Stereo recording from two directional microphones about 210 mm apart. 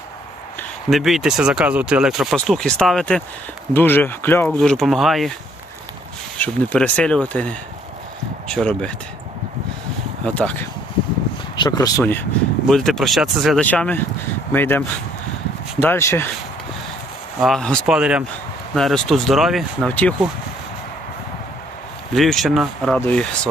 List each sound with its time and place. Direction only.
0.9 s speech: centre (ahead or behind)
6.4 s speech: 5° left (ahead or behind)
10.2 s speech: 5° left (ahead or behind)
11.5 s speech: 20° left (ahead or behind)
12.6 s speech: centre (ahead or behind)
17.4 s speech: 5° left (ahead or behind)
22.1 s speech: centre (ahead or behind)